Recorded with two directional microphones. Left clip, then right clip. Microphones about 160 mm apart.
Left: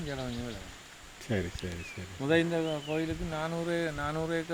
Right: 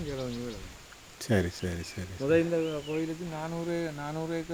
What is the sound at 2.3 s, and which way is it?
Speech, 70° left (ahead or behind).